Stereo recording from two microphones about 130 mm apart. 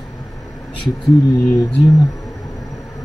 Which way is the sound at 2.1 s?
25° left (ahead or behind).